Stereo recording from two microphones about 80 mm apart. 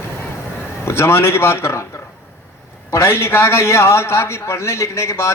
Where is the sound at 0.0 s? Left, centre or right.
Left.